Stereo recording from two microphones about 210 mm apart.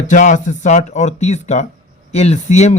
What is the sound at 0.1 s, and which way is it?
Speech, 35° left (ahead or behind).